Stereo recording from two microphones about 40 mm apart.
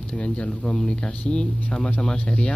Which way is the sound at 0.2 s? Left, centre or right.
Left.